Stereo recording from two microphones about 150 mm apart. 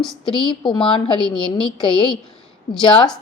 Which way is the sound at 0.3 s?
35° left (ahead or behind).